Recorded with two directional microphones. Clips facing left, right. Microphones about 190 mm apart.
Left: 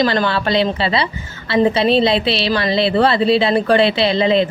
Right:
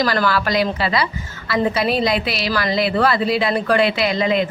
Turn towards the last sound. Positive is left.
turn(degrees=30)  # may be behind; listen again after turning